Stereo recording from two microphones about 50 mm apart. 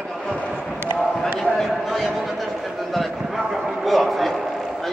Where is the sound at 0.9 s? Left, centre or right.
Centre.